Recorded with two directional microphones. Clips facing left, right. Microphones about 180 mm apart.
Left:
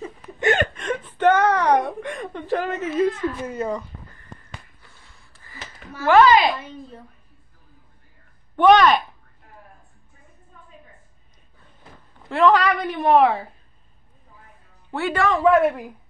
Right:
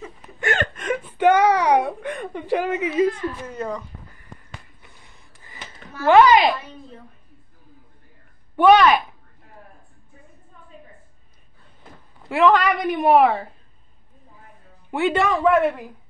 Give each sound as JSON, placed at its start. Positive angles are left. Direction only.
{"t": 0.4, "sound": "whimper", "side_deg": 20}
{"t": 0.7, "sound": "whimper", "side_deg": -5}
{"t": 2.4, "sound": "a woman's voice", "side_deg": -10}
{"t": 3.1, "sound": "speech", "side_deg": 5}
{"t": 4.8, "sound": "a sound", "side_deg": -15}
{"t": 8.5, "sound": "a woman's voice", "side_deg": -10}
{"t": 12.3, "sound": "a woman's voice", "side_deg": -10}
{"t": 14.9, "sound": "speech", "side_deg": -20}
{"t": 15.3, "sound": "speech", "side_deg": 5}